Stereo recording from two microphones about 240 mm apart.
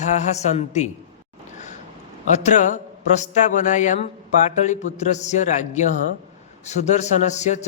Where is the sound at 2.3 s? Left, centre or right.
Left.